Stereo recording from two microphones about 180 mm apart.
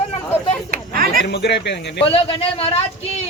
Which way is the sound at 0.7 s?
55° right (ahead or behind).